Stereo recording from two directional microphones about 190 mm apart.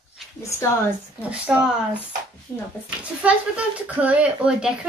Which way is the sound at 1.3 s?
5° right (ahead or behind).